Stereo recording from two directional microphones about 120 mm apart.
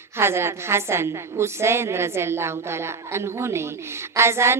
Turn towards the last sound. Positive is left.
turn(degrees=-20)  # may be behind; listen again after turning